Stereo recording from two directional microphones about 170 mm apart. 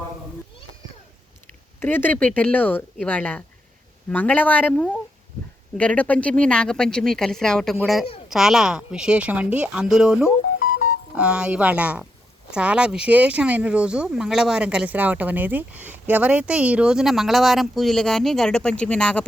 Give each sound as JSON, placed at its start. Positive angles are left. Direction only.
{"t": 1.8, "sound": "speech", "side_deg": 10}
{"t": 10.6, "sound": "music", "side_deg": 50}
{"t": 11.1, "sound": "speech", "side_deg": -5}